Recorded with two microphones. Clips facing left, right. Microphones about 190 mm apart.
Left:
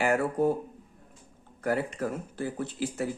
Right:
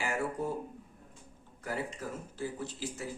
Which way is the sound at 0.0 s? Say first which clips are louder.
Left 9 dB; 65° left (ahead or behind).